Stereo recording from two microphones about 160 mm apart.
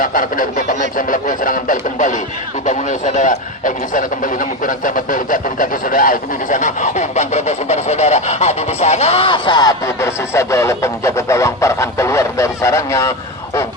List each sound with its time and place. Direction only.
0.0 s speech: 60° left (ahead or behind); by 13.7 s 20° left (ahead or behind)